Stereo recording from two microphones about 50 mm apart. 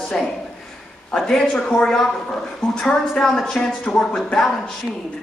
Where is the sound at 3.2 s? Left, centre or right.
Centre.